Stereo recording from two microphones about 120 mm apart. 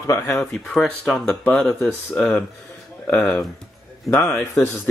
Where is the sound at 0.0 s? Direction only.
25° left (ahead or behind).